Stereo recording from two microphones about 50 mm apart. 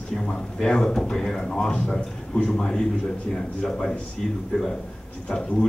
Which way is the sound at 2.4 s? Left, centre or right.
Centre.